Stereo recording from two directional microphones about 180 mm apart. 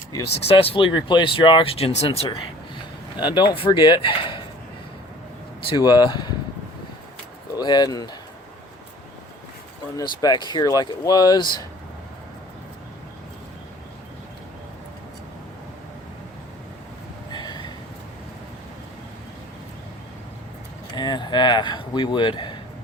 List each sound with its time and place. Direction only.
0.3 s speech: 35° left (ahead or behind)
5.6 s speech: 25° left (ahead or behind)
7.5 s speech: 25° left (ahead or behind)
10.0 s speech: 20° left (ahead or behind)
17.3 s a sound: 25° left (ahead or behind)
20.9 s speech: 25° left (ahead or behind)